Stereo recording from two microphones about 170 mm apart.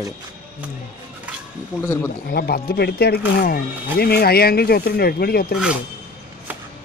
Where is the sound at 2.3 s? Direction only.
65° left (ahead or behind).